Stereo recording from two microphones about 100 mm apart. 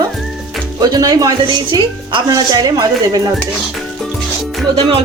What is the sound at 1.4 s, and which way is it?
Speech, 55° right (ahead or behind).